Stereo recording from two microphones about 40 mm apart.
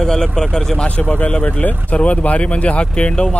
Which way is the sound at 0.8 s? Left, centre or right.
Left.